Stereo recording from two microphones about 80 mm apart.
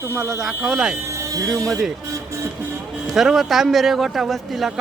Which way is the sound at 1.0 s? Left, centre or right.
Right.